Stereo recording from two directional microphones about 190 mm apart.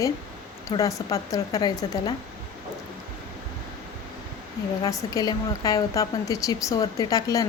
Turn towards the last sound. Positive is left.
turn(degrees=15)  # may be behind; listen again after turning